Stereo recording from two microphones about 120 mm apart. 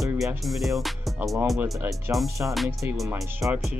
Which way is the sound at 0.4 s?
Centre (ahead or behind).